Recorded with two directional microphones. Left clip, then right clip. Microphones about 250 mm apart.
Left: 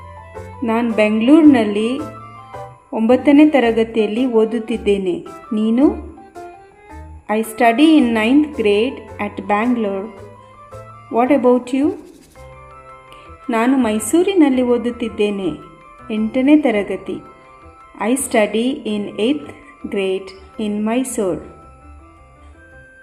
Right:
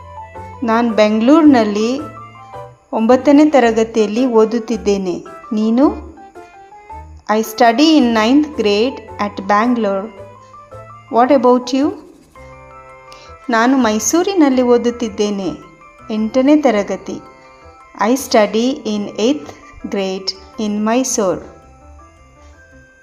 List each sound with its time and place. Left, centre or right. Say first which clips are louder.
0.6 s a woman's voice: right 3 dB; centre
2.9 s a woman's voice: right 2 dB; centre
7.3 s a woman's voice: right 3 dB; centre
11.1 s a woman's voice: right 3 dB; centre
13.5 s a woman's voice: right 3 dB; centre
18.3 s a woman's voice: right 2 dB; centre